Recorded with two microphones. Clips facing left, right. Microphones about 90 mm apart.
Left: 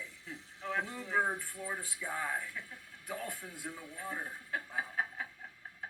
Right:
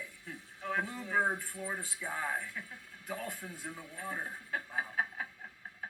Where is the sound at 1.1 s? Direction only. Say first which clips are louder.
Right 1 dB; 20° right (ahead or behind).